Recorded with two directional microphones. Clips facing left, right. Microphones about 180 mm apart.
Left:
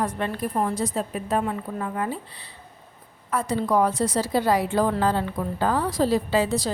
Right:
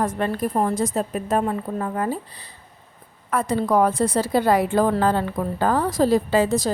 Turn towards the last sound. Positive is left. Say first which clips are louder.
# right 3 dB
turn(degrees=-45)  # may be behind; listen again after turning